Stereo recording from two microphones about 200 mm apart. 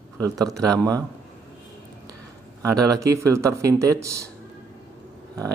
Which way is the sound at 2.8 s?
15° right (ahead or behind).